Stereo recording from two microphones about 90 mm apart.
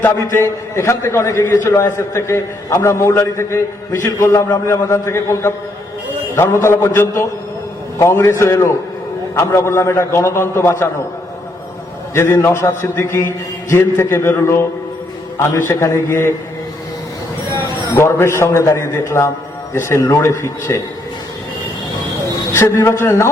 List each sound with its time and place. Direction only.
0.0 s a man's voice: 30° left (ahead or behind)
12.1 s a man's voice: 30° left (ahead or behind)
17.9 s a man's voice: 30° left (ahead or behind)
22.5 s a man's voice: 30° left (ahead or behind)